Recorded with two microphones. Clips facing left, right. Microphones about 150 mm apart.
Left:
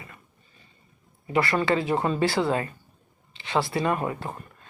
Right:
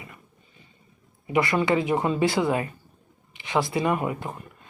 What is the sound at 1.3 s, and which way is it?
Speech, 15° right (ahead or behind).